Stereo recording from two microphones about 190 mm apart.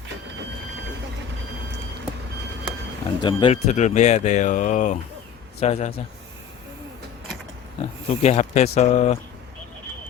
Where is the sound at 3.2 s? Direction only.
25° left (ahead or behind).